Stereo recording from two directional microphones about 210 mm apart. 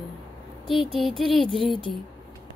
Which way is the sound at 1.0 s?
Centre (ahead or behind).